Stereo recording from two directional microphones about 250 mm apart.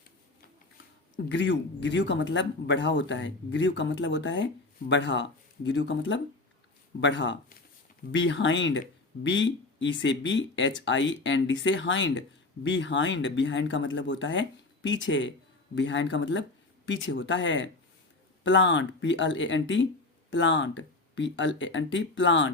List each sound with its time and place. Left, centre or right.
1.1 s speech: left